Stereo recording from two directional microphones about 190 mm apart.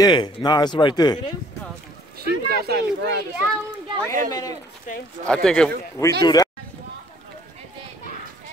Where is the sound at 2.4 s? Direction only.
55° right (ahead or behind).